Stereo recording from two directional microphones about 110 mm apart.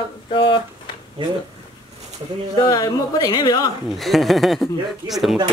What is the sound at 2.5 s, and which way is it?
Speech, 40° left (ahead or behind).